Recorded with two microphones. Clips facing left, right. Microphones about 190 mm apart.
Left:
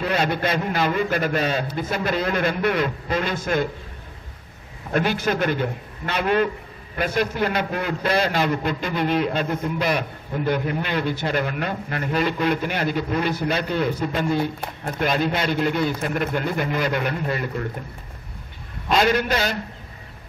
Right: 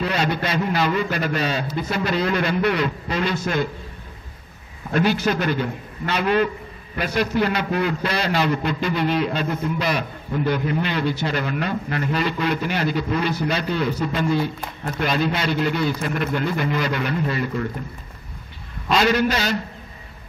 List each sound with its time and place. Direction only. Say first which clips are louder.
0.0 s a man's voice: left 1 dB; 50° left (ahead or behind)
4.9 s a man's voice: right 2 dB; 50° left (ahead or behind)
18.9 s a man's voice: right 1 dB; 50° left (ahead or behind)